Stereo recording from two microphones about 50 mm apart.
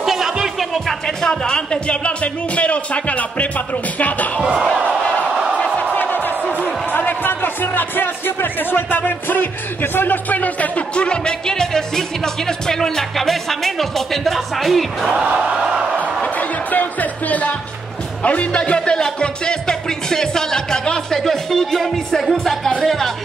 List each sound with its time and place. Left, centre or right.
0.0 s music: centre
0.8 s speech: centre; by 4.3 s left
4.4 s speech: centre
5.9 s speech: left
11.1 s music: centre
15.1 s crowd: centre
16.3 s music: left
18.2 s speech: left
19.1 s music: centre